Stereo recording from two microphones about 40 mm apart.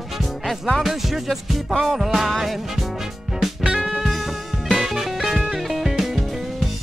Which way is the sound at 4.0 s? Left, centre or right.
Centre.